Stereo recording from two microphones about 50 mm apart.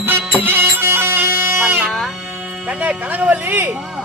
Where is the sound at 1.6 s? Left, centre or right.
Right.